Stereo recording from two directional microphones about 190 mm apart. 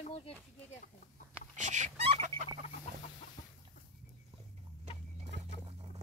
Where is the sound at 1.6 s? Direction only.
40° right (ahead or behind).